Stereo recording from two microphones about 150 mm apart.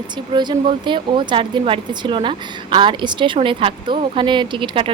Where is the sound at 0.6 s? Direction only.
35° right (ahead or behind).